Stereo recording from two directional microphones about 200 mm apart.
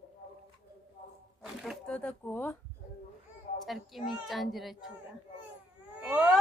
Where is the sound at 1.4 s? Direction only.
Centre (ahead or behind).